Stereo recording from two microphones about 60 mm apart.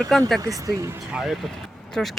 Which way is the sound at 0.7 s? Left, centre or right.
Right.